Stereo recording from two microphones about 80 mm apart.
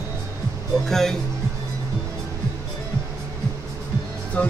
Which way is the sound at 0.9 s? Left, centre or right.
Centre.